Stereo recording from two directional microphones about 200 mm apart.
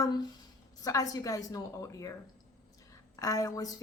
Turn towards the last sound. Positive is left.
turn(degrees=15)  # may be behind; listen again after turning